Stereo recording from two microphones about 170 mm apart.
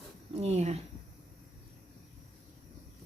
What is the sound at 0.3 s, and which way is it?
Speech, 40° right (ahead or behind).